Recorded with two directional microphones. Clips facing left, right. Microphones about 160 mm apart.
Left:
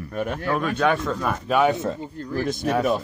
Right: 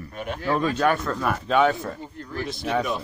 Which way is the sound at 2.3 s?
45° left (ahead or behind).